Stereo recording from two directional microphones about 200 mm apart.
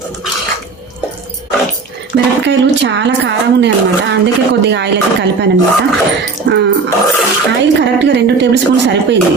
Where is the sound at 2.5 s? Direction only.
65° right (ahead or behind).